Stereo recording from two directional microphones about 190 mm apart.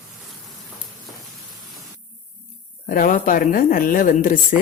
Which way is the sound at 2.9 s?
45° left (ahead or behind).